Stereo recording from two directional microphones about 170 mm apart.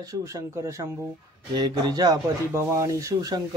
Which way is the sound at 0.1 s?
20° right (ahead or behind).